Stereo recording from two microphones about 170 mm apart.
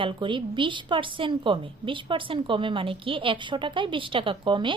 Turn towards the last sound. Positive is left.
turn(degrees=-30)  # may be behind; listen again after turning